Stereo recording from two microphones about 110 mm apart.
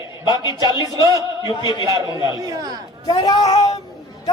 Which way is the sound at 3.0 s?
40° left (ahead or behind).